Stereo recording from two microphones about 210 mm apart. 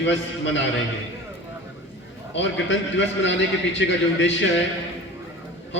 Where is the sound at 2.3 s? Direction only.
60° left (ahead or behind).